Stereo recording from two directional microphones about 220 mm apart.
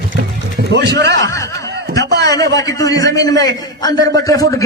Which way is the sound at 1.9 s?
50° right (ahead or behind).